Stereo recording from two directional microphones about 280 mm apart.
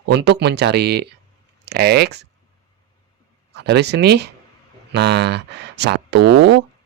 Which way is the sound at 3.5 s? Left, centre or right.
Right.